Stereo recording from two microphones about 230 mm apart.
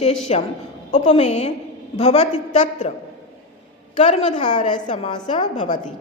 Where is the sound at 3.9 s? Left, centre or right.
Left.